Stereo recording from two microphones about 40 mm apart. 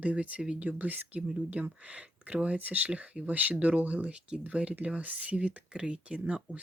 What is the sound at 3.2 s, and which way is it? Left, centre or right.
Speech, right.